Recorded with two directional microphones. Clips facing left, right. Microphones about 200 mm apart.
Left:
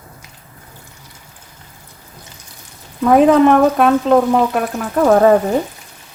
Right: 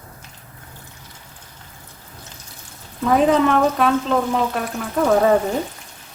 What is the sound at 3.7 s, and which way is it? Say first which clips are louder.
Speech: left 6 dB; 50° left (ahead or behind).